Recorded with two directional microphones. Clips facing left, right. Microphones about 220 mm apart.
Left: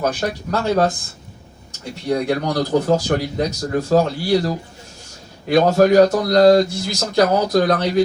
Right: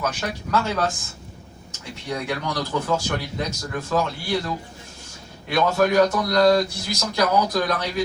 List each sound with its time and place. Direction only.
0.0 s speech: 35° left (ahead or behind)
2.0 s speech: 40° left (ahead or behind)